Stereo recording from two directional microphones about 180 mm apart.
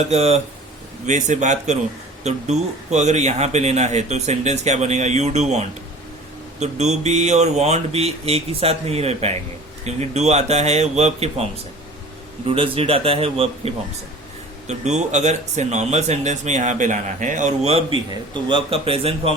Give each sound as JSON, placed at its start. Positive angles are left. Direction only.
{"t": 0.0, "sound": "a man's voice", "side_deg": -35}
{"t": 12.5, "sound": "a man's voice", "side_deg": -30}